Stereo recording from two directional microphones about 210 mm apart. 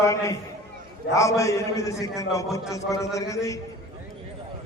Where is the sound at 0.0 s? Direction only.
15° left (ahead or behind).